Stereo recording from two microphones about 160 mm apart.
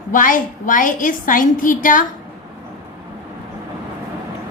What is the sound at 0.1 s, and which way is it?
A woman's voice, 55° left (ahead or behind).